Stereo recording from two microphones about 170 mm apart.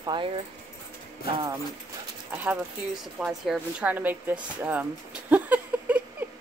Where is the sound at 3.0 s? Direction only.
Centre (ahead or behind).